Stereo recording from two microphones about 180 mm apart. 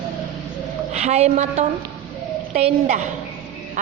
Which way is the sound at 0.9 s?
40° right (ahead or behind).